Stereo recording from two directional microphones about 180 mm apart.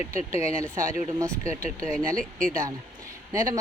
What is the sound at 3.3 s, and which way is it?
Speech, 20° right (ahead or behind).